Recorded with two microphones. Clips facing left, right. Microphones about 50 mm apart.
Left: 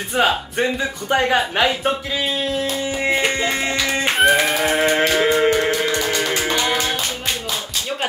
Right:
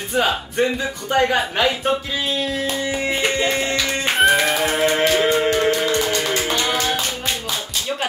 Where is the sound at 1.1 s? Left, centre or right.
Left.